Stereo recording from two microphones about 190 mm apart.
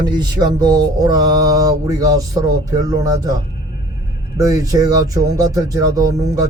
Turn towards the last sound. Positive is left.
turn(degrees=-20)  # may be behind; listen again after turning